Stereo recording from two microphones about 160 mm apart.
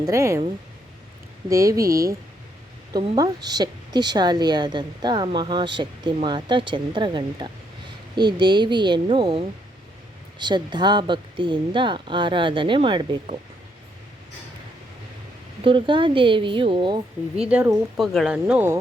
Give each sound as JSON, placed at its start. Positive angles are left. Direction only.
{"t": 0.0, "sound": "a woman's voice", "side_deg": -20}
{"t": 1.5, "sound": "a woman's voice", "side_deg": -20}
{"t": 3.2, "sound": "a woman's voice", "side_deg": -25}
{"t": 15.6, "sound": "speech", "side_deg": -30}
{"t": 17.4, "sound": "speech", "side_deg": -5}